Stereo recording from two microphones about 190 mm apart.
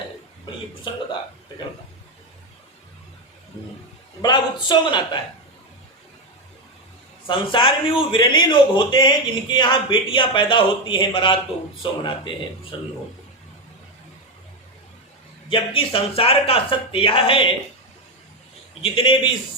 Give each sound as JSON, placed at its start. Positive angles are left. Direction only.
{"t": 4.2, "sound": "a man's voice", "side_deg": 25}
{"t": 7.3, "sound": "a man's voice", "side_deg": 25}
{"t": 15.4, "sound": "a man's voice", "side_deg": 25}
{"t": 18.8, "sound": "a man's voice", "side_deg": 25}